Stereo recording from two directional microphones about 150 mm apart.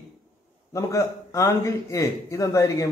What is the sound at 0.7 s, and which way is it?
A man's voice, 20° left (ahead or behind).